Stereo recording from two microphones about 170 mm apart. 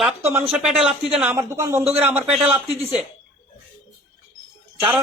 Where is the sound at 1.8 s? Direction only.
35° right (ahead or behind).